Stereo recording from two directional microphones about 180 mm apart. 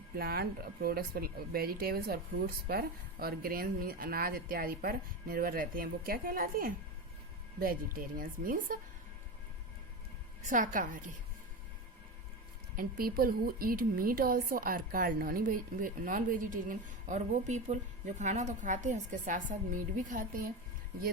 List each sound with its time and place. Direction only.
0.2 s a woman's voice: 60° right (ahead or behind)
10.4 s a woman's voice: 45° right (ahead or behind)
12.7 s a woman's voice: 55° right (ahead or behind)